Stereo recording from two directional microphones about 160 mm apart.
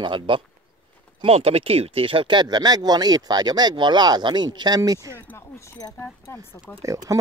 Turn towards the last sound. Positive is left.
turn(degrees=-20)  # may be behind; listen again after turning